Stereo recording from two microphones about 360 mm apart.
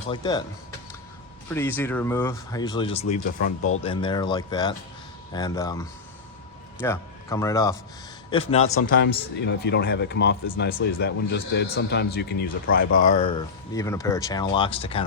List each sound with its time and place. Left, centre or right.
0.1 s speech: centre
1.5 s speech: centre
6.8 s a man's voice: centre
13.7 s speech: centre